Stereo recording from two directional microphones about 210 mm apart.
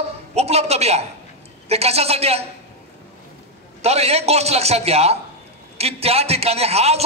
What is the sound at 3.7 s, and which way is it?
A man's voice, 30° right (ahead or behind).